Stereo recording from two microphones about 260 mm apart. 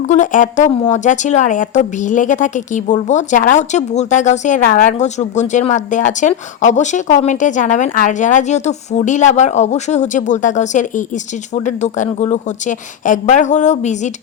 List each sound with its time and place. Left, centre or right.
0.1 s speech: left